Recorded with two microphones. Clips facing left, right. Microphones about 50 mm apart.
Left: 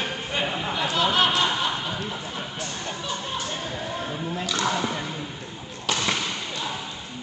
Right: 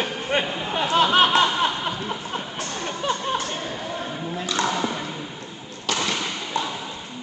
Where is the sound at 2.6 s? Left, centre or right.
Right.